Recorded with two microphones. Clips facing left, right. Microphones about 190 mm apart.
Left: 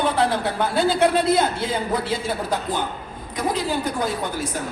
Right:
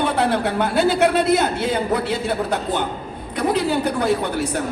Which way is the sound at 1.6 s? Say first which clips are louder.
Right 3 dB; 65° right (ahead or behind).